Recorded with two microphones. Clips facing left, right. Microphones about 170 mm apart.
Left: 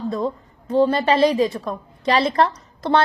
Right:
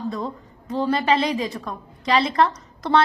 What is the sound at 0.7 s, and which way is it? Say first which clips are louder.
A woman's voice: left 4 dB; 30° left (ahead or behind).